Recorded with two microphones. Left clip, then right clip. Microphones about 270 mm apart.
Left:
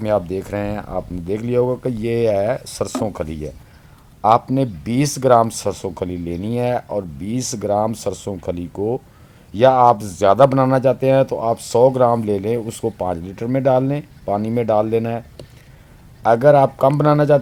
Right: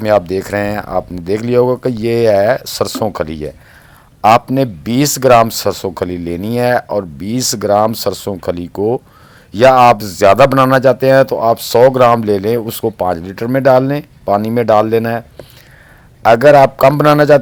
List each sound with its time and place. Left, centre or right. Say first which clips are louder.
0.0 s speech: right 7 dB; centre
16.2 s speech: right 6 dB; centre